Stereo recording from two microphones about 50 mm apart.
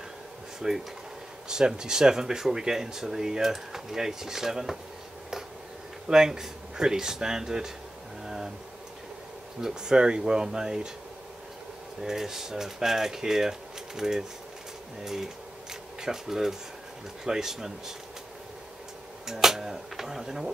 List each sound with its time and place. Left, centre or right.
0.6 s speech: centre
6.0 s speech: centre
9.6 s speech: centre
12.0 s speech: centre
19.2 s speech: centre